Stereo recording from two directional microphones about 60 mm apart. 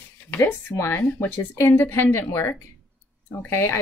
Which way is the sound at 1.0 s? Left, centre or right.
Left.